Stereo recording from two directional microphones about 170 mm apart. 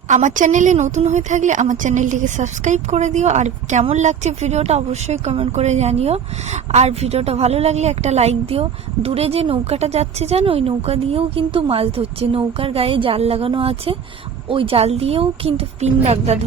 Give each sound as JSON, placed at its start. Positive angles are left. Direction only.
{"t": 0.1, "sound": "a woman's voice", "side_deg": -45}